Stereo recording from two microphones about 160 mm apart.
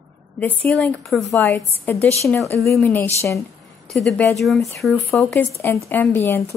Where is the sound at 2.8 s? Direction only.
10° left (ahead or behind).